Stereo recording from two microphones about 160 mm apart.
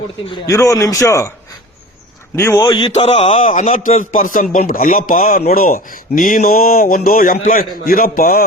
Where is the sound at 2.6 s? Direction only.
30° left (ahead or behind).